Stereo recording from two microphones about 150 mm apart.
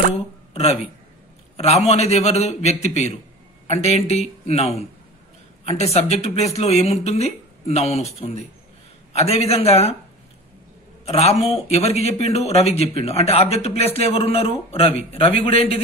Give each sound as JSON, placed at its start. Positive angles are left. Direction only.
{"t": 0.1, "sound": "a sound", "side_deg": 45}
{"t": 1.9, "sound": "speech", "side_deg": 45}
{"t": 11.1, "sound": "speech", "side_deg": 45}